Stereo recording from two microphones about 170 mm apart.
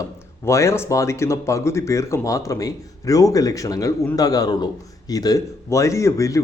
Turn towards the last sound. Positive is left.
turn(degrees=20)  # may be behind; listen again after turning